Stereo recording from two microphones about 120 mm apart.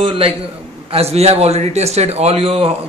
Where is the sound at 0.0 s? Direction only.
50° right (ahead or behind).